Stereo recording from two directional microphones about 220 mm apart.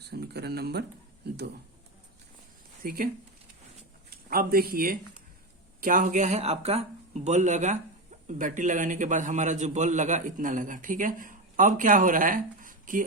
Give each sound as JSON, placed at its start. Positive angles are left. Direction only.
{"t": 0.0, "sound": "speech", "side_deg": -45}
{"t": 2.8, "sound": "a man's voice", "side_deg": -40}
{"t": 4.1, "sound": "a man's voice", "side_deg": -40}